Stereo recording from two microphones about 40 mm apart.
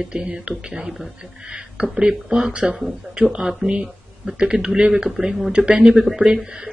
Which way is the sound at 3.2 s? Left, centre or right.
Centre.